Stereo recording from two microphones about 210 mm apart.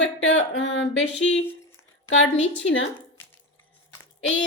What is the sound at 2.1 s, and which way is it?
Speech, 65° left (ahead or behind).